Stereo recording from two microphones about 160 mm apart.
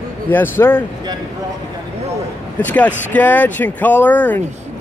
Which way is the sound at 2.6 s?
10° left (ahead or behind).